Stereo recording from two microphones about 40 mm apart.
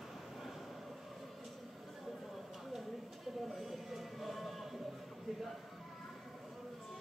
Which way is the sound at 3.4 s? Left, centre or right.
Centre.